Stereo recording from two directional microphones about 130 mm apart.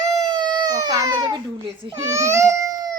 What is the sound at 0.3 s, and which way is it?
A child's voice, 30° right (ahead or behind).